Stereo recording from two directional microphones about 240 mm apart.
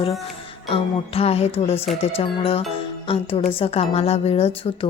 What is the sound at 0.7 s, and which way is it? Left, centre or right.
A woman's voice, left.